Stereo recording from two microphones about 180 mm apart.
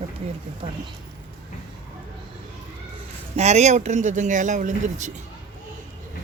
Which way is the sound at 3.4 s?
40° right (ahead or behind).